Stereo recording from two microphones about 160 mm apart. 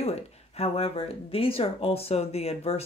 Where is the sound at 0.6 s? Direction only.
40° left (ahead or behind).